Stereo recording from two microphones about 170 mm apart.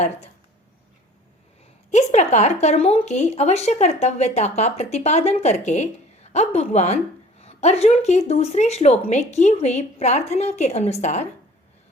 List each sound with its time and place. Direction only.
1.9 s a woman's voice: 40° left (ahead or behind)